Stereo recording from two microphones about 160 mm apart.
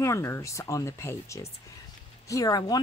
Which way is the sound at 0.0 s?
20° left (ahead or behind).